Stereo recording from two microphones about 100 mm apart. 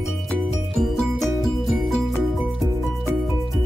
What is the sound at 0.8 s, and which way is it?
Music, centre (ahead or behind).